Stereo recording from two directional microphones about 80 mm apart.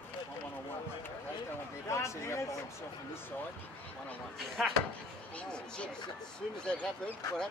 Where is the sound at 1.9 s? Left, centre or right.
Left.